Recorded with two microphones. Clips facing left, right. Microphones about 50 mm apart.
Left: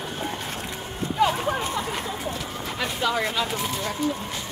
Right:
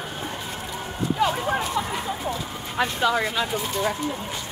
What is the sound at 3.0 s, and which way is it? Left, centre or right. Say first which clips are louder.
Speech: even; centre.